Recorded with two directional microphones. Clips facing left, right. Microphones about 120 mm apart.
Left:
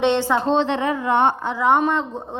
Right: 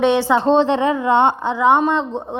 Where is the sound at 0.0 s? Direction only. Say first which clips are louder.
Right 3 dB; 10° right (ahead or behind).